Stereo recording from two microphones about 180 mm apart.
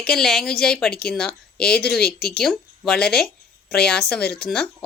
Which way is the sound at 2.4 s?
Centre (ahead or behind).